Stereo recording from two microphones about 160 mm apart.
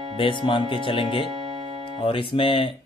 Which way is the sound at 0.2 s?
30° left (ahead or behind).